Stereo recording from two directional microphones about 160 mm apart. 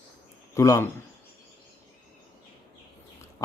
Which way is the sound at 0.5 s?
20° left (ahead or behind).